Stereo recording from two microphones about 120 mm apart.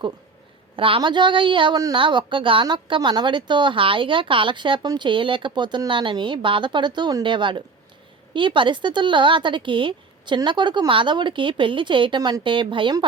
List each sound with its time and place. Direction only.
0.8 s speech: 50° right (ahead or behind)
1.7 s speech: 30° right (ahead or behind)
2.0 s speech: 45° right (ahead or behind)